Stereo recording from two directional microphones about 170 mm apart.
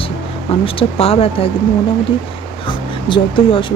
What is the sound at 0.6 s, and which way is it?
Speech, 35° left (ahead or behind).